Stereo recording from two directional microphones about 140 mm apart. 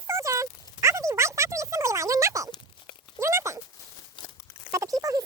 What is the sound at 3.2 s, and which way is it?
Speech, 20° right (ahead or behind).